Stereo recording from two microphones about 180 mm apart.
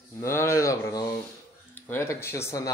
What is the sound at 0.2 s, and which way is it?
Speech, 15° left (ahead or behind).